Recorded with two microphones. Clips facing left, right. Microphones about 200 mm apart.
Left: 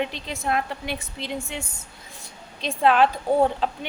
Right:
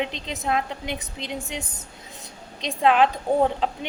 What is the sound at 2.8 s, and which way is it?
Speech, 15° right (ahead or behind).